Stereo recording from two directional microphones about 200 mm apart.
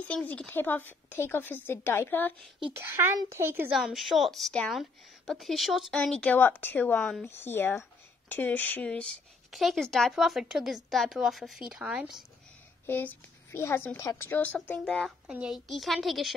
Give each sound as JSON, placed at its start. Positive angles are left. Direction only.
{"t": 0.1, "sound": "a woman's voice", "side_deg": 5}
{"t": 2.7, "sound": "a woman's voice", "side_deg": -10}
{"t": 12.8, "sound": "a woman's voice", "side_deg": 10}